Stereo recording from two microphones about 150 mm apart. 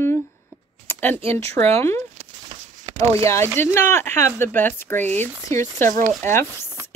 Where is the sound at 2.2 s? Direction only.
50° right (ahead or behind).